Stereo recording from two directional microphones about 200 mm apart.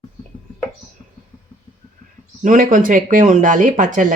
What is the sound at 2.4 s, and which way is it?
Speech, 40° right (ahead or behind).